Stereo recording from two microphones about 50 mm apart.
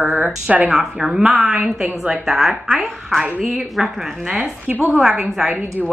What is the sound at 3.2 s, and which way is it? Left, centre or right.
Speech, right.